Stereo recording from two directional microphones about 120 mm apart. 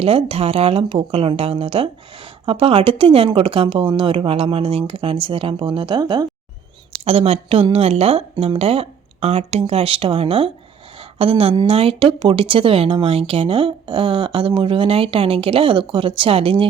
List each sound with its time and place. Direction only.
0.0 s a woman's voice: 50° right (ahead or behind)
7.0 s a woman's voice: 55° right (ahead or behind)